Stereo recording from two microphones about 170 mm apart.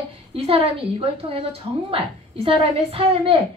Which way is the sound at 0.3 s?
35° right (ahead or behind).